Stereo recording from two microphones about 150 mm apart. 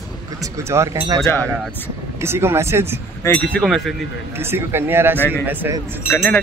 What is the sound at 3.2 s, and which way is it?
Speech, 10° left (ahead or behind).